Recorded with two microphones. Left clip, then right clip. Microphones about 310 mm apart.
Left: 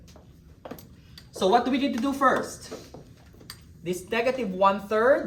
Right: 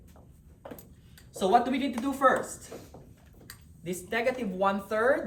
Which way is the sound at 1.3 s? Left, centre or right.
Centre.